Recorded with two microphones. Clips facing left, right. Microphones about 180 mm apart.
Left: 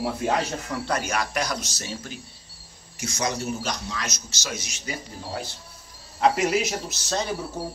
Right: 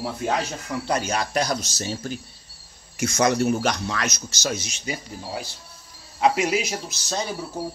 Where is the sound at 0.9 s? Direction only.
25° right (ahead or behind).